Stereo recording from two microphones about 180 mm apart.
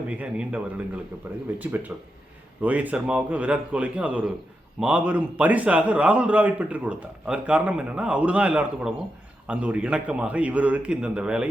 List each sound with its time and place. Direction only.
0.1 s a man's voice: 5° right (ahead or behind)